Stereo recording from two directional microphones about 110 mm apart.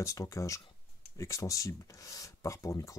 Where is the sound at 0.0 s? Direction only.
30° left (ahead or behind).